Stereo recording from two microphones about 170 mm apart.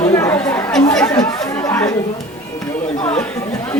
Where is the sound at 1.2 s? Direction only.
15° left (ahead or behind).